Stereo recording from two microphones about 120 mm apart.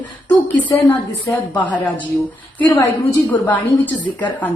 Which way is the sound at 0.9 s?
15° left (ahead or behind).